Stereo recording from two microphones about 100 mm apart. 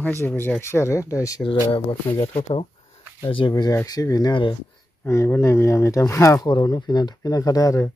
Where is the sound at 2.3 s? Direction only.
75° left (ahead or behind).